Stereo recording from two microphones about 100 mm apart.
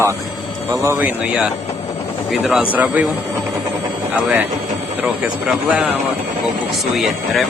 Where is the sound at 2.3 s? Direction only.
Centre (ahead or behind).